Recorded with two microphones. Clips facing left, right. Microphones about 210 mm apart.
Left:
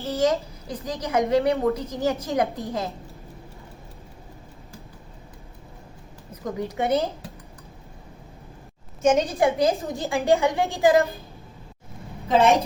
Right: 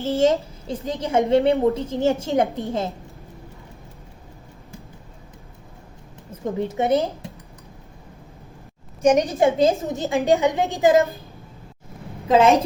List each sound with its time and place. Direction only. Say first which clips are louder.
0.0 s a woman's voice: right 4 dB; 25° right (ahead or behind)
6.3 s a woman's voice: right 4 dB; 25° right (ahead or behind)
9.0 s a woman's voice: right 3 dB; 15° right (ahead or behind)